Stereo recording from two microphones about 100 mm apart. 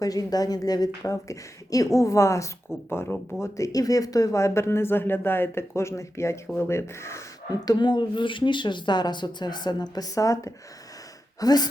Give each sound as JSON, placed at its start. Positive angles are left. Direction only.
{"t": 0.0, "sound": "a woman's voice", "side_deg": 40}
{"t": 3.4, "sound": "speech", "side_deg": 35}
{"t": 7.5, "sound": "a woman's voice", "side_deg": 40}